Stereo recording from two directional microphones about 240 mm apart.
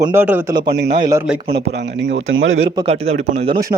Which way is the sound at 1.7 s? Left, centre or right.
Right.